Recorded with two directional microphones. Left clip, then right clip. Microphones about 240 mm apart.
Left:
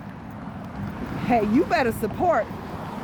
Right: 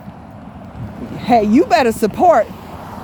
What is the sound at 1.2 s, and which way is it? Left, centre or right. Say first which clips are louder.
Speech: right 9 dB; right.